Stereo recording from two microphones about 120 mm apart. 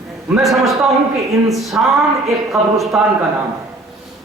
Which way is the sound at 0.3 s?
Centre (ahead or behind).